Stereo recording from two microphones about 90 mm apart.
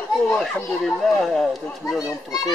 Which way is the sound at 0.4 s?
5° left (ahead or behind).